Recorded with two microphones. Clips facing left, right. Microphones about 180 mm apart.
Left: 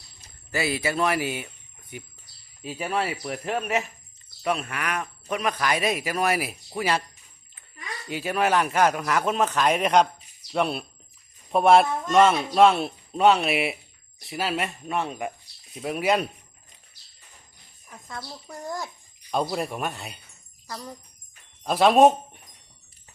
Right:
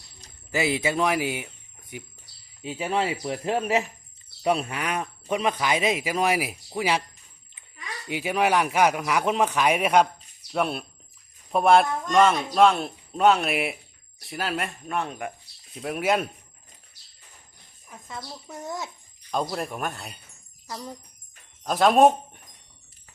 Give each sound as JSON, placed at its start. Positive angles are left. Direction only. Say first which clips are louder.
{"t": 0.5, "sound": "a man's voice", "louder": "right 2 dB", "side_deg": -15}
{"t": 8.0, "sound": "a man's voice", "louder": "right 1 dB", "side_deg": -15}
{"t": 17.8, "sound": "speech", "louder": "even", "side_deg": -5}
{"t": 20.7, "sound": "speech", "louder": "right 1 dB", "side_deg": -10}
{"t": 21.6, "sound": "speech", "louder": "left 1 dB", "side_deg": 0}